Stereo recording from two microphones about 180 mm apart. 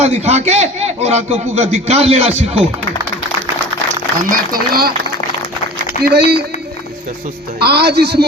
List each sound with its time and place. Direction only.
0.0 s a man's voice: 35° right (ahead or behind)
4.2 s speech: 50° right (ahead or behind)
6.0 s speech: 65° right (ahead or behind)
7.6 s speech: 65° right (ahead or behind)